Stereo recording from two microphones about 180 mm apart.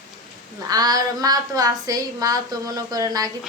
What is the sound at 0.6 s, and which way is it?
A woman's voice, 20° right (ahead or behind).